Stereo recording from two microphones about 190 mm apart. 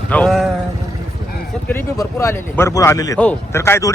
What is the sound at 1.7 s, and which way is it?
Speech, 15° left (ahead or behind).